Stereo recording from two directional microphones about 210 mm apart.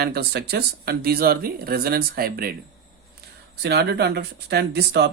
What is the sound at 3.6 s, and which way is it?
Speech, 50° right (ahead or behind).